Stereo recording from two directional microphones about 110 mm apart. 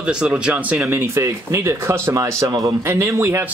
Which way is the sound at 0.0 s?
10° right (ahead or behind).